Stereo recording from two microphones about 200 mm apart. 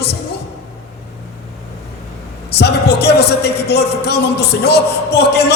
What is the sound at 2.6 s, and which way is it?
A man's voice, 55° left (ahead or behind).